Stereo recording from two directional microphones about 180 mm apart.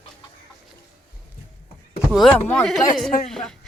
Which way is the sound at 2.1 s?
Centre (ahead or behind).